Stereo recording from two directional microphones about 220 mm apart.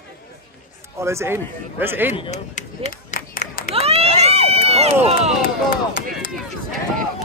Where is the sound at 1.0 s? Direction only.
10° right (ahead or behind).